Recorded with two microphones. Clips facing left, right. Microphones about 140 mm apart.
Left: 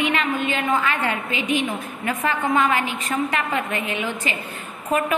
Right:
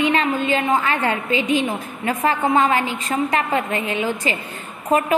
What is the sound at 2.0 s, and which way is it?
A woman's voice, 30° right (ahead or behind).